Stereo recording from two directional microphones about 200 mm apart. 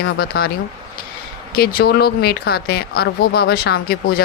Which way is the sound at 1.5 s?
50° left (ahead or behind).